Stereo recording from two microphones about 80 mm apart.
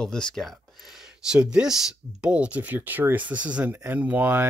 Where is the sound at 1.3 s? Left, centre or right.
Centre.